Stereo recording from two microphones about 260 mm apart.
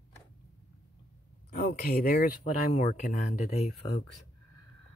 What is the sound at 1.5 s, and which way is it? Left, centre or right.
Speech, left.